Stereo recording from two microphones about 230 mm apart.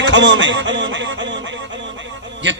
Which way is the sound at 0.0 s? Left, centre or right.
Right.